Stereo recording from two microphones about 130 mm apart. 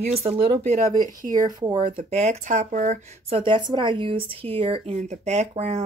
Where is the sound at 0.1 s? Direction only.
50° right (ahead or behind).